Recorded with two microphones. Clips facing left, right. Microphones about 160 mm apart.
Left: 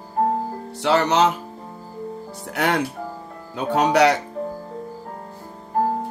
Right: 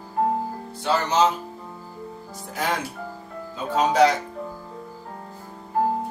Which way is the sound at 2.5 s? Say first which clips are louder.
Left 5 dB; 70° left (ahead or behind).